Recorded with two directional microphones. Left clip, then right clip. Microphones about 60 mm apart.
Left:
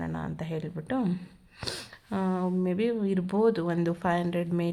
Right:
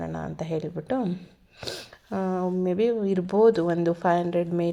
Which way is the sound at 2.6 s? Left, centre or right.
Centre.